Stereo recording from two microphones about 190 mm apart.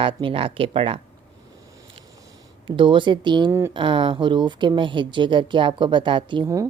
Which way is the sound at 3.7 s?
25° right (ahead or behind).